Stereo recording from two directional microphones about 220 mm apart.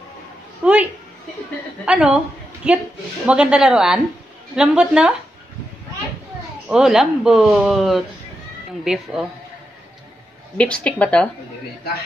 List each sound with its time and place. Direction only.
0.6 s speech: 5° right (ahead or behind)
1.9 s speech: 5° right (ahead or behind)
6.7 s speech: centre (ahead or behind)
10.6 s speech: 5° left (ahead or behind)